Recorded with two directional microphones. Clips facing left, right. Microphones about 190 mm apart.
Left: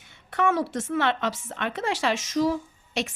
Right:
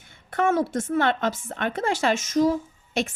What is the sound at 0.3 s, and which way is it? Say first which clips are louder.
Speech: right 2 dB; 50° right (ahead or behind).